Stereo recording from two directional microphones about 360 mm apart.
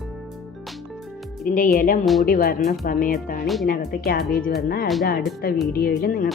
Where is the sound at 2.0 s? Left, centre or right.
Centre.